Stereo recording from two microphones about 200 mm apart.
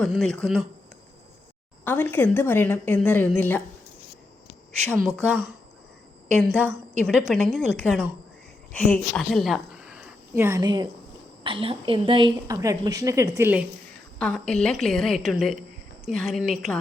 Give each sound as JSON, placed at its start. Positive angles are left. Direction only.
{"t": 0.0, "sound": "a woman's voice", "side_deg": 0}
{"t": 1.8, "sound": "speech", "side_deg": 10}
{"t": 5.0, "sound": "a woman's voice", "side_deg": 5}
{"t": 7.0, "sound": "a woman's voice", "side_deg": 0}
{"t": 14.2, "sound": "a woman's voice", "side_deg": 5}